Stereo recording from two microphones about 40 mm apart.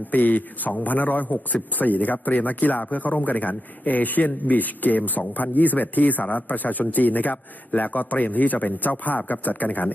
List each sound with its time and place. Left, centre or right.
0.1 s speech: left